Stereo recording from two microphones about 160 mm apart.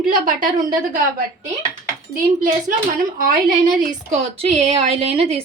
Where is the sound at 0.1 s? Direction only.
60° right (ahead or behind).